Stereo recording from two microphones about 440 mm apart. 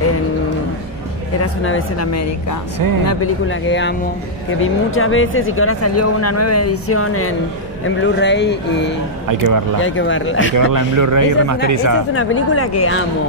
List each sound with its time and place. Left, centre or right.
1.4 s speech: left
9.3 s a man's voice: right
9.8 s speech: left
10.5 s speech: right
12.1 s speech: left